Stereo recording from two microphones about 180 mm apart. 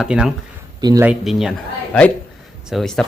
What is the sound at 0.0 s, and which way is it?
Speech, 5° right (ahead or behind).